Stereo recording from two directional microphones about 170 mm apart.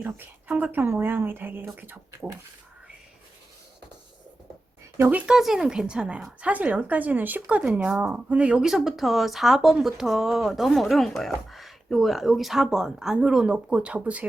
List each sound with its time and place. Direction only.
0.0 s speech: 10° right (ahead or behind)
4.9 s speech: 10° right (ahead or behind)